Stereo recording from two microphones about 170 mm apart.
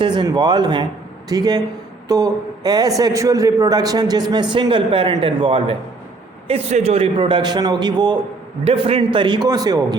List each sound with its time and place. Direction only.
0.0 s a man's voice: 25° right (ahead or behind)